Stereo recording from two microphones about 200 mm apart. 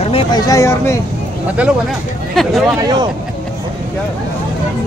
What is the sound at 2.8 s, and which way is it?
Speech, 20° right (ahead or behind).